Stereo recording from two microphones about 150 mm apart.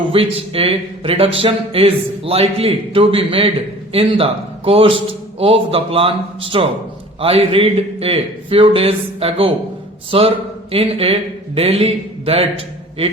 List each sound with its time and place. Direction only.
0.1 s a man's voice: 40° right (ahead or behind)